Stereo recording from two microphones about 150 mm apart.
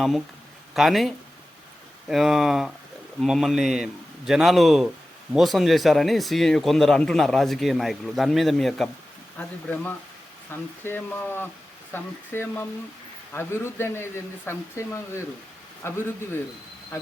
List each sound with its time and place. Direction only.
0.7 s speech: centre (ahead or behind); by 16.4 s 15° left (ahead or behind)